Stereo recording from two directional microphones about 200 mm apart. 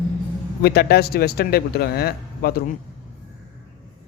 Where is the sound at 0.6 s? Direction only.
50° left (ahead or behind).